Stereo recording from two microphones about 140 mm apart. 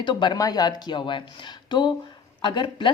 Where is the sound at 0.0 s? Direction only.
35° left (ahead or behind).